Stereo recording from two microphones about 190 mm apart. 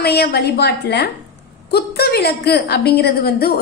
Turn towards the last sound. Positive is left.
turn(degrees=55)  # may be behind; listen again after turning